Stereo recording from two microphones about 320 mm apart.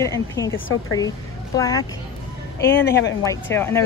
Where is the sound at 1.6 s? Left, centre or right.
Centre.